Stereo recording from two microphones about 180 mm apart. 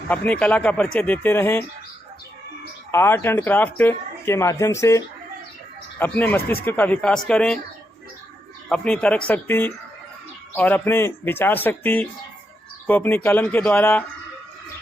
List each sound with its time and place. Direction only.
0.1 s speech: 5° left (ahead or behind)
2.9 s speech: 15° left (ahead or behind)
8.7 s speech: 5° left (ahead or behind)